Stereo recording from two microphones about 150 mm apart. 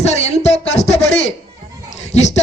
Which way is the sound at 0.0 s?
45° left (ahead or behind).